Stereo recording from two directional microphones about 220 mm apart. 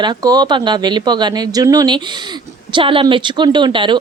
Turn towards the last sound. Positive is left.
turn(degrees=-20)  # may be behind; listen again after turning